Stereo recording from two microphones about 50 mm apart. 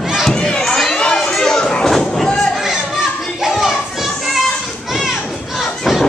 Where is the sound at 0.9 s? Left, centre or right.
Centre.